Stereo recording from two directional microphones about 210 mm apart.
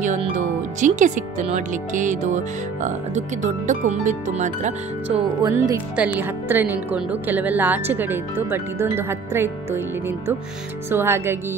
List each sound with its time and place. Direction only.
0.0 s speech: 35° right (ahead or behind)
5.1 s speech: 15° right (ahead or behind)